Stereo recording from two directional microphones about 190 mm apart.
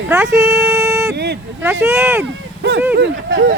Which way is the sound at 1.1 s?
60° right (ahead or behind).